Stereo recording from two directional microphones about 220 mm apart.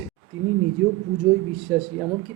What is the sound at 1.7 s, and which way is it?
Speech, 5° left (ahead or behind).